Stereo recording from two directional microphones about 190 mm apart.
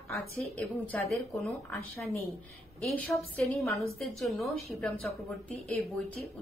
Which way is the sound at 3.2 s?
Centre (ahead or behind).